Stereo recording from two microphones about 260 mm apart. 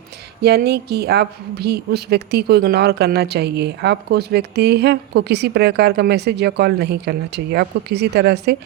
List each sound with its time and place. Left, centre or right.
0.4 s a woman's voice: right